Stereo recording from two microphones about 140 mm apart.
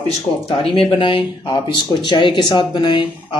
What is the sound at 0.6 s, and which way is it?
Speech, 40° left (ahead or behind).